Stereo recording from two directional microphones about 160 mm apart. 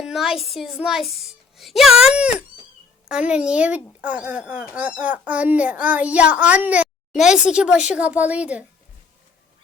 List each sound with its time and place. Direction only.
0.0 s a child's voice: centre (ahead or behind)